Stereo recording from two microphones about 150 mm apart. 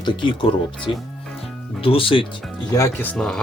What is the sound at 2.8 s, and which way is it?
Speech, 15° left (ahead or behind).